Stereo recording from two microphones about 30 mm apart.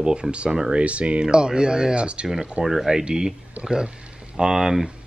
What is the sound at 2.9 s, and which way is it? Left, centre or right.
Speech, right.